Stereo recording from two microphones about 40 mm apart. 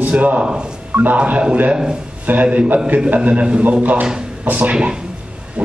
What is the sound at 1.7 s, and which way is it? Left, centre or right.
Speech, right.